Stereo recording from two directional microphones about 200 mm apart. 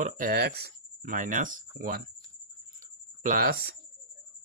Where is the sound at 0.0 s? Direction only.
45° right (ahead or behind).